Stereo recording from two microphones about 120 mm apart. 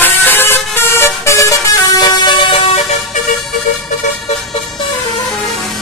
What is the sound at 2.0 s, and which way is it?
Vehicle, 40° left (ahead or behind).